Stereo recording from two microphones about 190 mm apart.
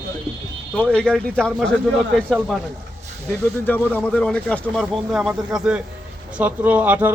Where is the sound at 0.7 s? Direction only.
5° left (ahead or behind).